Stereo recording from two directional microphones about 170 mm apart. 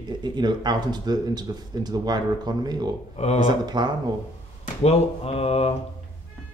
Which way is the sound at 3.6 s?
25° right (ahead or behind).